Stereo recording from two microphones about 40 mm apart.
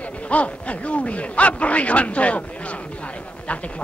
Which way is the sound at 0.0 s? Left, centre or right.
Left.